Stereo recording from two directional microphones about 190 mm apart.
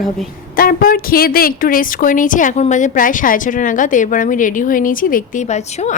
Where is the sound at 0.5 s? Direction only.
50° left (ahead or behind).